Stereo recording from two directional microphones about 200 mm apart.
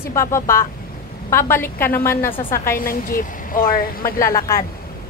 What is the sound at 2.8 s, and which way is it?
A woman's voice, 45° left (ahead or behind).